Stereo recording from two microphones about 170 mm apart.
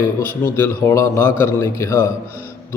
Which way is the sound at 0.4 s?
15° left (ahead or behind).